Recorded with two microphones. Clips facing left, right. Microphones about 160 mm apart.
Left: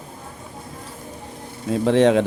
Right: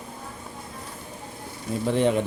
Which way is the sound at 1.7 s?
90° left.